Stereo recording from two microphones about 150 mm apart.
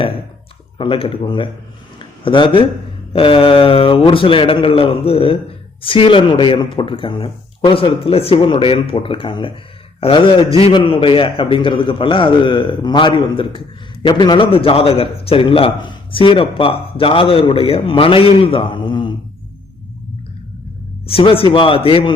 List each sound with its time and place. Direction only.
0.8 s a man's voice: 35° left (ahead or behind)
2.0 s a sound: 35° left (ahead or behind)
3.1 s a man's voice: 35° left (ahead or behind)
21.1 s a man's voice: 40° left (ahead or behind)